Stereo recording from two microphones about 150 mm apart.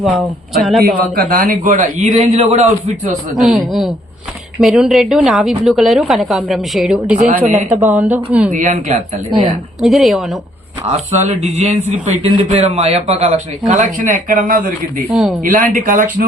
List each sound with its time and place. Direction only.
0.0 s a woman's voice: centre (ahead or behind)
0.8 s a man's voice: 85° right; by 2.9 s 45° right (ahead or behind)
3.4 s a woman's voice: centre (ahead or behind)
7.2 s a man's voice: 65° right (ahead or behind)
7.8 s speech: 10° right (ahead or behind)
8.4 s a man's voice: 55° right (ahead or behind)
9.8 s a woman's voice: centre (ahead or behind)
10.9 s a man's voice: 50° right (ahead or behind)
13.8 s a man's voice: 60° right (ahead or behind)
15.1 s a woman's voice: centre (ahead or behind)
15.4 s a man's voice: 60° right (ahead or behind)